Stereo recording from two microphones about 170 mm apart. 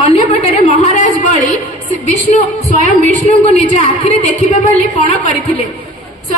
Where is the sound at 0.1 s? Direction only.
40° left (ahead or behind).